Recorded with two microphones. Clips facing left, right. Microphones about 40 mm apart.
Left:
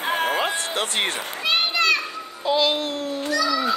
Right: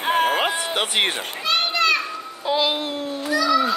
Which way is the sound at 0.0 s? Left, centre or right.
Right.